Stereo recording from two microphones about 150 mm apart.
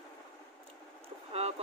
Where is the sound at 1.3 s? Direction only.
45° right (ahead or behind).